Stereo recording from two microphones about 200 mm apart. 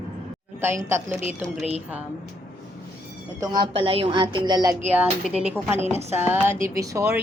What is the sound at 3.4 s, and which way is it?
A woman's voice, 20° right (ahead or behind).